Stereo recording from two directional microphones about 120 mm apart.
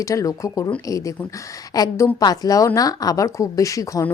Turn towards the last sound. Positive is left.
turn(degrees=25)  # may be behind; listen again after turning